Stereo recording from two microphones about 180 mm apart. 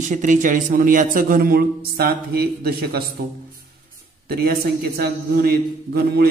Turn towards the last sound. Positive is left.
turn(degrees=-60)  # may be behind; listen again after turning